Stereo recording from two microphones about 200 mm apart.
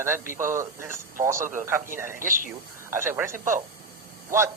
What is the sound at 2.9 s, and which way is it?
Speech, 10° right (ahead or behind).